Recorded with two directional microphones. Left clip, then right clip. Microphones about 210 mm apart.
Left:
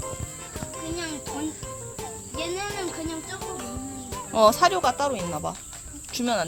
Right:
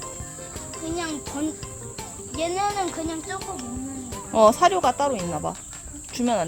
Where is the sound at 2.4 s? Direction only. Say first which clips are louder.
Right 6 dB; 40° right (ahead or behind).